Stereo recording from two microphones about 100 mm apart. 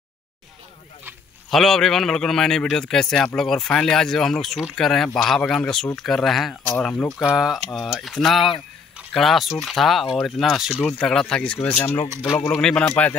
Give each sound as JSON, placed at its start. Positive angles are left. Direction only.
{"t": 1.5, "sound": "a man's voice", "side_deg": 5}
{"t": 7.2, "sound": "a man's voice", "side_deg": -5}
{"t": 11.0, "sound": "speech", "side_deg": 10}